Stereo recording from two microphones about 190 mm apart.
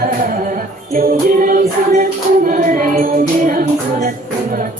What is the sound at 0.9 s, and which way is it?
Music, 45° right (ahead or behind).